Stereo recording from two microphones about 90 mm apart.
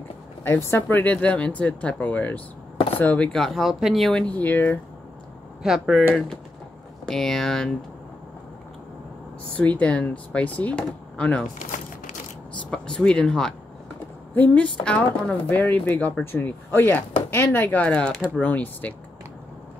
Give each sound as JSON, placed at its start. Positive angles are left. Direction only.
{"t": 0.4, "sound": "speech", "side_deg": 25}
{"t": 3.3, "sound": "speech", "side_deg": 0}
{"t": 4.1, "sound": "speech", "side_deg": 15}
{"t": 5.6, "sound": "speech", "side_deg": 0}
{"t": 9.6, "sound": "speech", "side_deg": 15}
{"t": 12.7, "sound": "speech", "side_deg": 10}
{"t": 15.4, "sound": "speech", "side_deg": 20}